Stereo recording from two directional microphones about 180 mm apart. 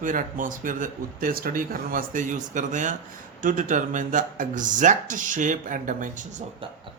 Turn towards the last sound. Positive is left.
turn(degrees=-45)  # may be behind; listen again after turning